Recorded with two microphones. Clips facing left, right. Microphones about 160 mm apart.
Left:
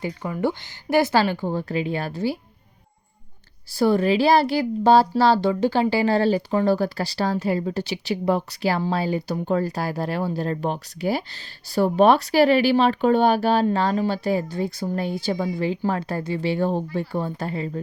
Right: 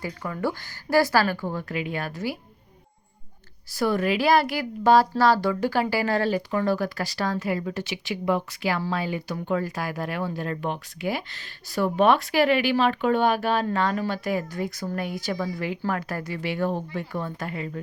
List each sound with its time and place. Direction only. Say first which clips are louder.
0.0 s speech: left 4 dB; 25° left (ahead or behind)
3.7 s speech: left 5 dB; 30° left (ahead or behind)